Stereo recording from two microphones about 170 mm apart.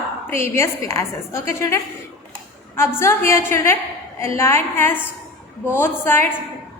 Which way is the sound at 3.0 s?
15° left (ahead or behind).